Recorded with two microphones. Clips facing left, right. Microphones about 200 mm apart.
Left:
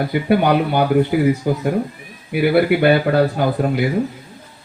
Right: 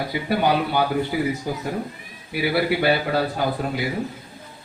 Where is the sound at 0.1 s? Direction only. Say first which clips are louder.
Left 5 dB; 55° left (ahead or behind).